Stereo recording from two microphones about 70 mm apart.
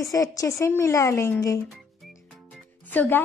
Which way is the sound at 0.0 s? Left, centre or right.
Left.